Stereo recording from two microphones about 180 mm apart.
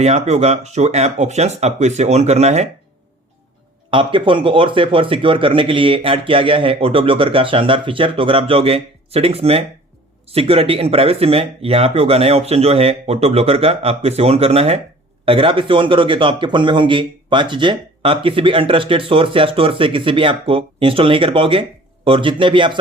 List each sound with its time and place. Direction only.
0.0 s speech: 35° right (ahead or behind)
3.9 s speech: 30° right (ahead or behind)